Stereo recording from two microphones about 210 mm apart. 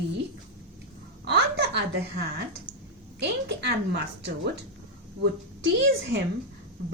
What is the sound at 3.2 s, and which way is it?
Speech, 55° right (ahead or behind).